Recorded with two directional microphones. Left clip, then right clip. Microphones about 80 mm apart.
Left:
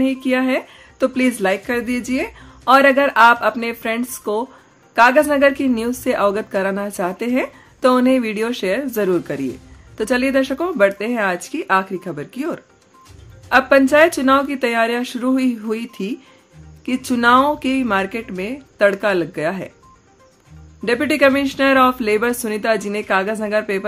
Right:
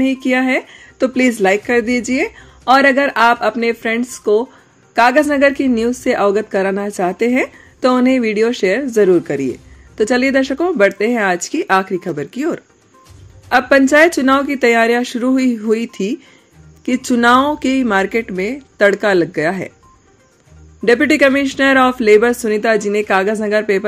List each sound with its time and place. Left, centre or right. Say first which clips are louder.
0.0 s speech: right 3 dB; right
20.8 s speech: right 4 dB; right